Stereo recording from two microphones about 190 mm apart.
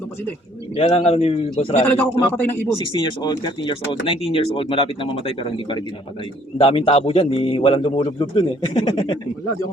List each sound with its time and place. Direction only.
0.8 s a man's voice: 30° left (ahead or behind)
1.9 s a man's voice: 10° left (ahead or behind)
2.7 s speech: 25° left (ahead or behind)